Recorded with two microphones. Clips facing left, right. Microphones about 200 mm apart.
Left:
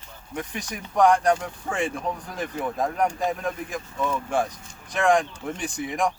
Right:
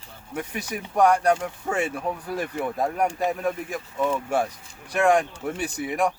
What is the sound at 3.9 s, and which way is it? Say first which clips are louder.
Speech: right 3 dB; 20° right (ahead or behind).